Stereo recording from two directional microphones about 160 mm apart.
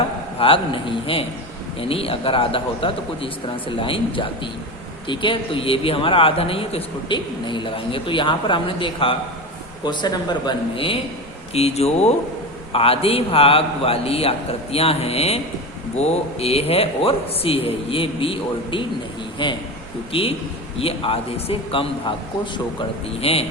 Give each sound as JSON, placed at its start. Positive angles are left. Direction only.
{"t": 0.3, "sound": "a man's voice", "side_deg": 35}
{"t": 23.2, "sound": "a man's voice", "side_deg": 40}